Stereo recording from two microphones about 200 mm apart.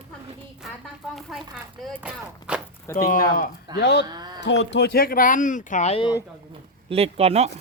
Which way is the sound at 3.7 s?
55° left (ahead or behind).